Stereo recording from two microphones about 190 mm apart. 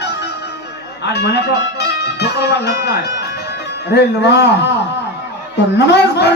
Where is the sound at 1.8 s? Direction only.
60° left (ahead or behind).